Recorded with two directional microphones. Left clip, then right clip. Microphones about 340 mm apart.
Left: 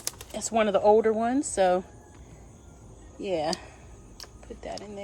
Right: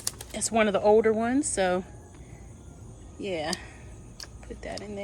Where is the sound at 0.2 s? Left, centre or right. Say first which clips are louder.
Right 1 dB; centre.